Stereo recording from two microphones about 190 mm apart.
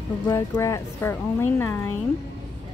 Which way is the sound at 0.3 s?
15° left (ahead or behind).